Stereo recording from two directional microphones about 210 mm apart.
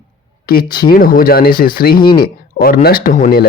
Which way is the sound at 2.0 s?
20° left (ahead or behind).